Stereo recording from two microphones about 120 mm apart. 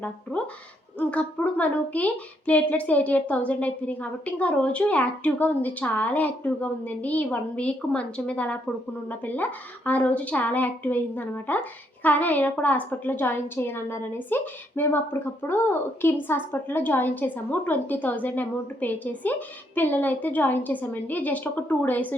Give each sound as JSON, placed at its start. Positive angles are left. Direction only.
{"t": 0.0, "sound": "a woman's voice", "side_deg": 10}